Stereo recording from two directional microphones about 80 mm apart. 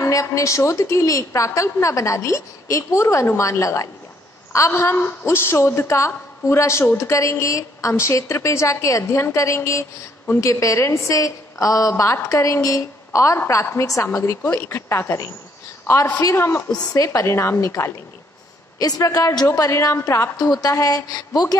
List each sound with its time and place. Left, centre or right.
0.0 s a woman's voice: left
14.0 s a woman's voice: left
16.3 s a woman's voice: left
16.9 s a woman's voice: left
18.8 s a woman's voice: left
20.3 s a woman's voice: left